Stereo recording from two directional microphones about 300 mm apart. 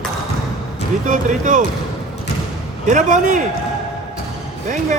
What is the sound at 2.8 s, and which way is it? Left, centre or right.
Speech, right.